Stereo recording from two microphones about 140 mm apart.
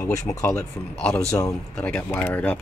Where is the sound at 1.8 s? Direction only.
15° left (ahead or behind).